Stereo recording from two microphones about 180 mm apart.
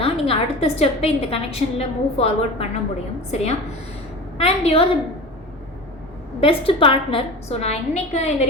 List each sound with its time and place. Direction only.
0.0 s a woman's voice: 35° left (ahead or behind)
6.4 s a woman's voice: 30° left (ahead or behind)